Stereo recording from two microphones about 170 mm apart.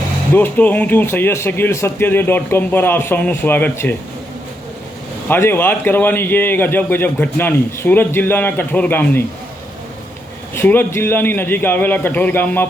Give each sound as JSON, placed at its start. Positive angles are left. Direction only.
{"t": 0.3, "sound": "a man's voice", "side_deg": 10}
{"t": 5.3, "sound": "a man's voice", "side_deg": 10}
{"t": 10.5, "sound": "a man's voice", "side_deg": 15}